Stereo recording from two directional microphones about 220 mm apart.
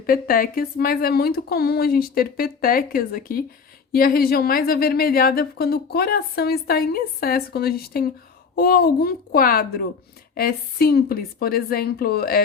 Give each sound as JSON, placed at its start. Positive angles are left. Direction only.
{"t": 0.0, "sound": "a woman's voice", "side_deg": 40}